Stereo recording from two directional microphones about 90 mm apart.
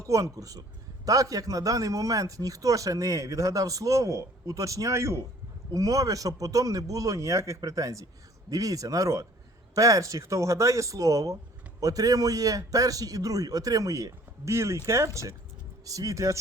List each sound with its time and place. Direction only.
0.0 s a man's voice: 35° right (ahead or behind)